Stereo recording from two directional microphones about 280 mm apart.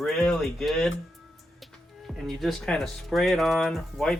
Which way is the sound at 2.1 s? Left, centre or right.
Centre.